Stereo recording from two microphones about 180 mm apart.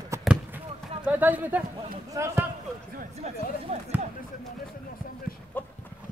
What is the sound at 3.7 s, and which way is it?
Speech, 35° right (ahead or behind).